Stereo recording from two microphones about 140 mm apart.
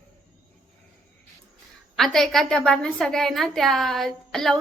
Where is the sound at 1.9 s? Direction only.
5° left (ahead or behind).